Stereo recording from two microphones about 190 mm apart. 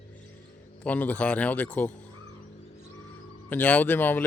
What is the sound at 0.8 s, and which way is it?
Speech, 10° left (ahead or behind).